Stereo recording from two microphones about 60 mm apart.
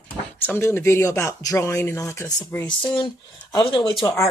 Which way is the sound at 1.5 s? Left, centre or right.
Left.